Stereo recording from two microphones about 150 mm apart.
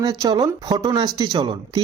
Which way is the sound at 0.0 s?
30° right (ahead or behind).